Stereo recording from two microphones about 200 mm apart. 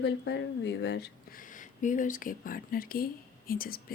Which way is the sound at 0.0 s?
60° left (ahead or behind).